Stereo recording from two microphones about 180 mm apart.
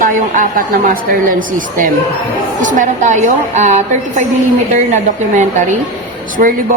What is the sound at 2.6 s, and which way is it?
A woman's voice, 45° right (ahead or behind).